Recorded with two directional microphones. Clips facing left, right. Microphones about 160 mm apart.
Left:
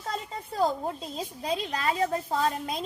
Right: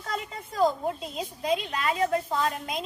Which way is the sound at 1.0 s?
35° left (ahead or behind).